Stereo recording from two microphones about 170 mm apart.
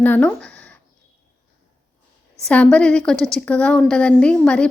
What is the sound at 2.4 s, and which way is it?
A woman's voice, 10° left (ahead or behind).